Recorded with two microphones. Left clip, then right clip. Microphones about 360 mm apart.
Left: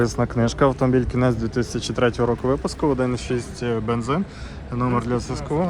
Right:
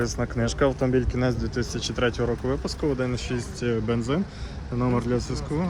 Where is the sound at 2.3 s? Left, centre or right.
Left.